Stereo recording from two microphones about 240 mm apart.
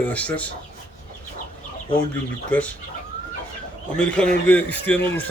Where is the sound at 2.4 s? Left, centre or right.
Centre.